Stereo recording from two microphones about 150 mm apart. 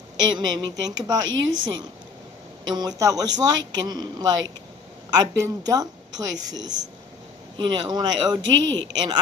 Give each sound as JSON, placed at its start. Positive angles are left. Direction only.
{"t": 0.3, "sound": "speech", "side_deg": -30}